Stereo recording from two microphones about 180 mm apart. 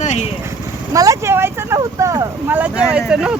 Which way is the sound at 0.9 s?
15° right (ahead or behind).